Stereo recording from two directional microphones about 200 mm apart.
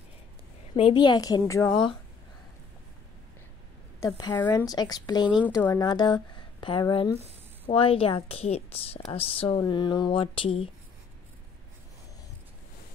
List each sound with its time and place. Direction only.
0.7 s a woman's voice: 25° left (ahead or behind)
4.0 s a woman's voice: 15° left (ahead or behind)
5.4 s a woman's voice: 10° left (ahead or behind); by 10.7 s 25° left (ahead or behind)